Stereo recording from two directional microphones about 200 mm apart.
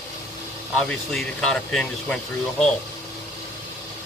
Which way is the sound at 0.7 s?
5° left (ahead or behind).